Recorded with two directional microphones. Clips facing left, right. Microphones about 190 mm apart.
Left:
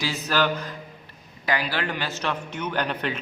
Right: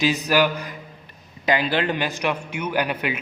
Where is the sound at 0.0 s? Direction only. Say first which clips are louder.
Right 5 dB; 15° right (ahead or behind).